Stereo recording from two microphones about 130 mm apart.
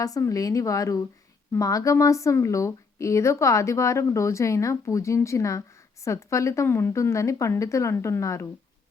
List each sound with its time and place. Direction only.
0.0 s a woman's voice: 25° left (ahead or behind)